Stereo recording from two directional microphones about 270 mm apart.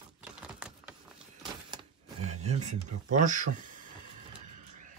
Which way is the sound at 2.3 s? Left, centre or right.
Right.